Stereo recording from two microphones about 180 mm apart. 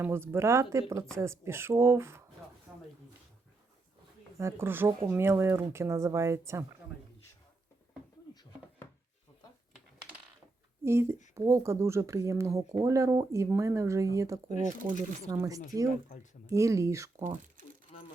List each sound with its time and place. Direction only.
0.0 s speech: 15° right (ahead or behind)
2.7 s a sound: 5° right (ahead or behind)
4.4 s speech: 15° right (ahead or behind)
10.8 s speech: 15° right (ahead or behind)